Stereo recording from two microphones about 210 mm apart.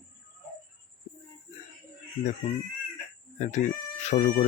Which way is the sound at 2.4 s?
25° left (ahead or behind).